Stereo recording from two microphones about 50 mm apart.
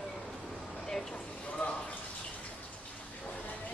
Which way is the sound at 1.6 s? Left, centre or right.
Left.